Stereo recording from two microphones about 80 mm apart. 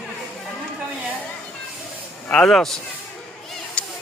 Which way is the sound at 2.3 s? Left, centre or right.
Centre.